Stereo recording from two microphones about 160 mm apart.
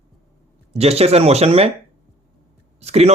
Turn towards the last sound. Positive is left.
turn(degrees=-40)  # may be behind; listen again after turning